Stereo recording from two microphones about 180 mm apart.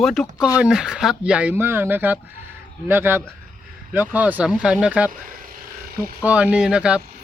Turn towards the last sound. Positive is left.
turn(degrees=-5)  # may be behind; listen again after turning